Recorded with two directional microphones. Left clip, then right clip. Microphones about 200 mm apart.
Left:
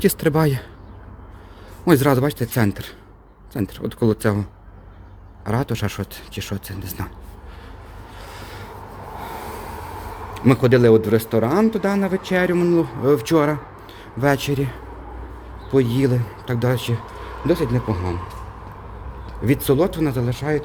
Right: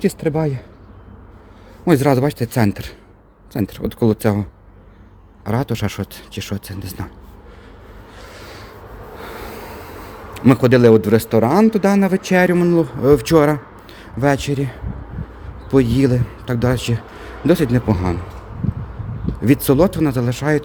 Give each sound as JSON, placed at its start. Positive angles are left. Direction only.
{"t": 0.0, "sound": "speech", "side_deg": 0}
{"t": 1.8, "sound": "speech", "side_deg": -10}
{"t": 5.5, "sound": "speech", "side_deg": -15}
{"t": 10.3, "sound": "speech", "side_deg": -20}
{"t": 15.6, "sound": "speech", "side_deg": -30}
{"t": 17.4, "sound": "speech", "side_deg": -35}
{"t": 19.4, "sound": "speech", "side_deg": -25}